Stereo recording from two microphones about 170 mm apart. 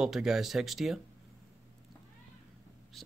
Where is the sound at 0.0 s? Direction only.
5° right (ahead or behind).